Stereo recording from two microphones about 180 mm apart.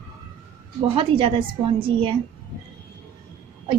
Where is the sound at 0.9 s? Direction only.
30° right (ahead or behind).